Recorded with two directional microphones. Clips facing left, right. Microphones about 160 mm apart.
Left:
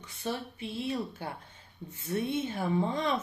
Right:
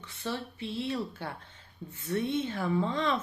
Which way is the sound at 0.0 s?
15° left (ahead or behind).